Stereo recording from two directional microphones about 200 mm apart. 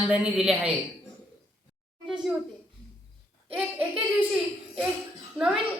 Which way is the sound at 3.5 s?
5° right (ahead or behind).